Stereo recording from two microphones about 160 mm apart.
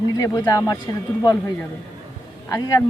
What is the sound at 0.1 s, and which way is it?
Speech, 20° left (ahead or behind).